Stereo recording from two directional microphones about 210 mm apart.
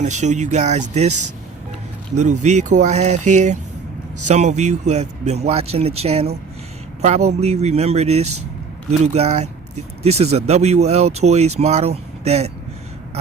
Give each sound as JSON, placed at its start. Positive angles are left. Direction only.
{"t": 0.0, "sound": "speech", "side_deg": -35}
{"t": 2.4, "sound": "speech", "side_deg": -35}